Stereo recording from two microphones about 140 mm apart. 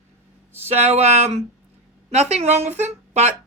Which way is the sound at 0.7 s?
50° right (ahead or behind).